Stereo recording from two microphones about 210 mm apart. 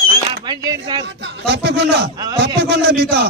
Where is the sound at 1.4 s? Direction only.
55° right (ahead or behind).